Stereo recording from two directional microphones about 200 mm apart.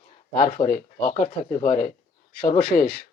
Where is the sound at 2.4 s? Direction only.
50° left (ahead or behind).